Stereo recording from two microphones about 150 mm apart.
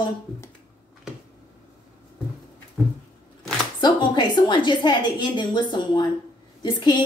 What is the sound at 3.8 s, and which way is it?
A woman's voice, 30° left (ahead or behind).